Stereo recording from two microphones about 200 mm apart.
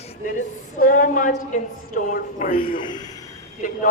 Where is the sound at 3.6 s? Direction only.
40° left (ahead or behind).